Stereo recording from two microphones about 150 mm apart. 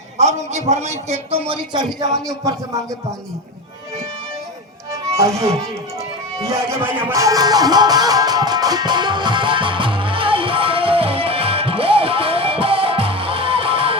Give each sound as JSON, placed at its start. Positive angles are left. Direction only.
{"t": 0.2, "sound": "a man's voice", "side_deg": -50}
{"t": 2.2, "sound": "speech", "side_deg": -20}
{"t": 5.1, "sound": "speech", "side_deg": -20}
{"t": 6.5, "sound": "music", "side_deg": -15}